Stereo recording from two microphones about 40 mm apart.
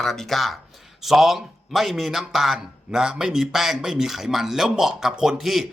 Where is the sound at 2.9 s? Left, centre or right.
Centre.